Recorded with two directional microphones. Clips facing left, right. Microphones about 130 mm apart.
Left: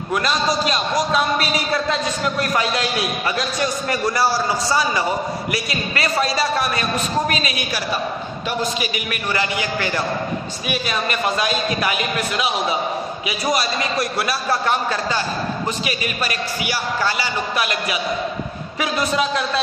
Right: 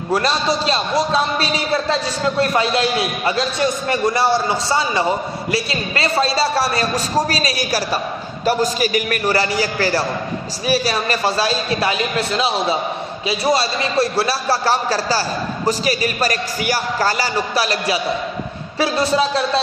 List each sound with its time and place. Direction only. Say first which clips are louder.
0.1 s a man's voice: right 2 dB; 30° right (ahead or behind)